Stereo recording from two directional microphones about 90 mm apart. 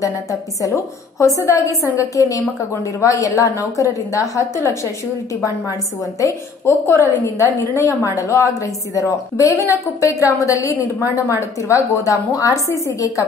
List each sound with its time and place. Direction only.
1.2 s a woman's voice: 35° left (ahead or behind)
6.6 s a woman's voice: 25° left (ahead or behind)